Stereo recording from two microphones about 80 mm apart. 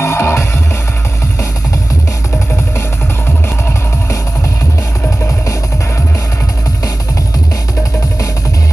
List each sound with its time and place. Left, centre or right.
0.0 s music: left